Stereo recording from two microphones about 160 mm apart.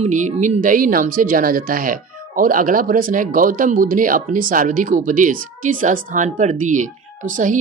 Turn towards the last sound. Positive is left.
turn(degrees=-55)  # may be behind; listen again after turning